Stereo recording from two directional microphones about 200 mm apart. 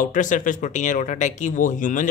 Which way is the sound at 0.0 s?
40° left (ahead or behind).